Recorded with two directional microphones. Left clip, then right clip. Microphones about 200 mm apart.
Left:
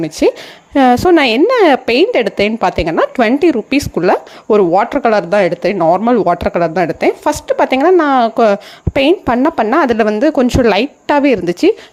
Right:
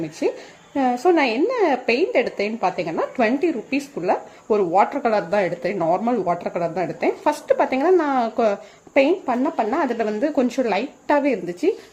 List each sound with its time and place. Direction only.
0.0 s a woman's voice: 40° left (ahead or behind)